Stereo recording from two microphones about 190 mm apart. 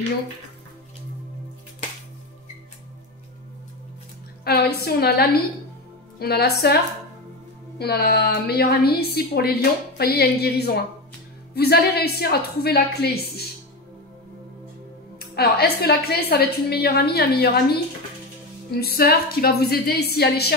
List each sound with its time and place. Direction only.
4.5 s a woman's voice: 55° left (ahead or behind)
7.8 s a woman's voice: 55° left (ahead or behind)
15.1 s a woman's voice: 55° left (ahead or behind)
18.7 s a woman's voice: 55° left (ahead or behind)